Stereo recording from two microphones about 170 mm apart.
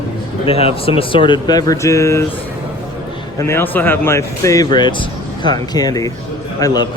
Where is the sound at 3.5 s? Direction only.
15° left (ahead or behind).